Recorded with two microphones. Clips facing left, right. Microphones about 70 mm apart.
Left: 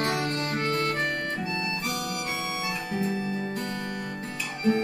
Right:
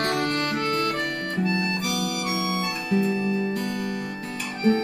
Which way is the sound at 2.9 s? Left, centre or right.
Right.